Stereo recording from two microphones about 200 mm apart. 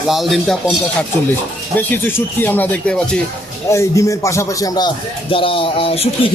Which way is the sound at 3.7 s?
15° left (ahead or behind).